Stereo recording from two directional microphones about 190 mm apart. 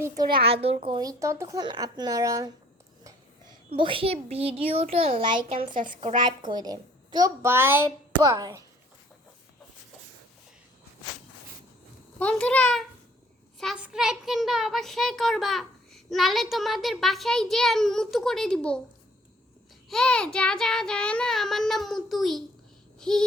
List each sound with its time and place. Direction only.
0.3 s speech: 30° right (ahead or behind)
3.7 s speech: 25° right (ahead or behind)
5.7 s a woman's voice: 45° right (ahead or behind)
6.0 s speech: 25° right (ahead or behind)
12.2 s a child's voice: 5° left (ahead or behind)
19.9 s a child's voice: 5° left (ahead or behind)
23.0 s a sound: 5° left (ahead or behind)